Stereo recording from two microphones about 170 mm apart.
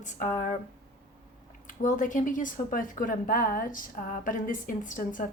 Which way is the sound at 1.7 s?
50° left (ahead or behind).